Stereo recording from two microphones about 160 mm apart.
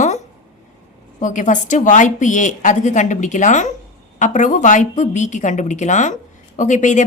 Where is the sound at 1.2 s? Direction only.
50° left (ahead or behind).